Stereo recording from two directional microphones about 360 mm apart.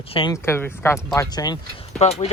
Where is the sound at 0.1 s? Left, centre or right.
Centre.